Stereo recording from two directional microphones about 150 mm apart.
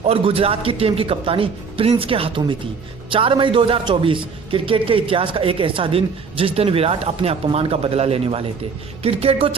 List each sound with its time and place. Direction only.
0.0 s a man's voice: 40° right (ahead or behind)